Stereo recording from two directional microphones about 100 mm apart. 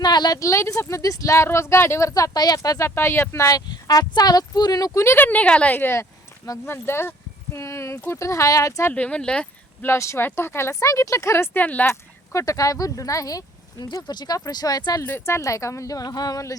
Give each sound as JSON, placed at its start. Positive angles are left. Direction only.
{"t": 0.0, "sound": "speech", "side_deg": 45}
{"t": 5.1, "sound": "speech", "side_deg": 15}
{"t": 8.9, "sound": "speech", "side_deg": 15}
{"t": 9.8, "sound": "speech", "side_deg": 25}
{"t": 11.9, "sound": "speech", "side_deg": 30}
{"t": 15.0, "sound": "speech", "side_deg": 20}
{"t": 15.4, "sound": "speech", "side_deg": 30}